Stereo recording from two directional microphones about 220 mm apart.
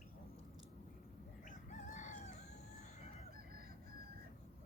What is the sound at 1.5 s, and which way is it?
Fowl, 35° left (ahead or behind).